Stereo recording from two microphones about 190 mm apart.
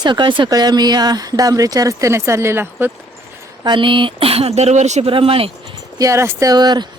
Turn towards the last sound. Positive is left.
turn(degrees=-20)  # may be behind; listen again after turning